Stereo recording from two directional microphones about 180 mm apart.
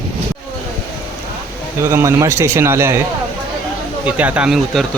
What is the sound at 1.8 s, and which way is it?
Speech, 15° right (ahead or behind).